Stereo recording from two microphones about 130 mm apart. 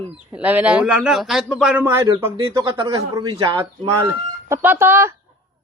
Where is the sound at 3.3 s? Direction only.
45° right (ahead or behind).